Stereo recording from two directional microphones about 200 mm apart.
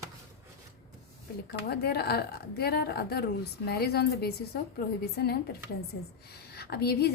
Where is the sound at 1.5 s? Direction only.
55° left (ahead or behind).